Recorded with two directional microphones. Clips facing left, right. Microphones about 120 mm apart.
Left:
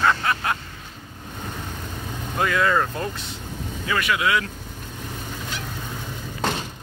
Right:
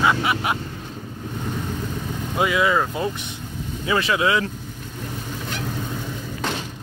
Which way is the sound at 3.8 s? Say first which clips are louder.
Right 3 dB; 25° right (ahead or behind).